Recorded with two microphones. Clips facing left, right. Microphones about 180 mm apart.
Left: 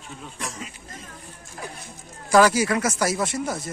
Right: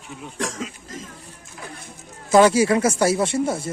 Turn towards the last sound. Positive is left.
turn(degrees=-30)  # may be behind; listen again after turning